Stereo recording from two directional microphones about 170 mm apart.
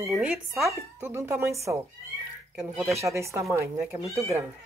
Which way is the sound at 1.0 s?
15° right (ahead or behind).